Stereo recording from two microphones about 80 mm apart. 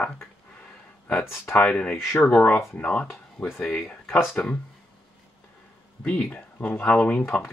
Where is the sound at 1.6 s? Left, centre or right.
Centre.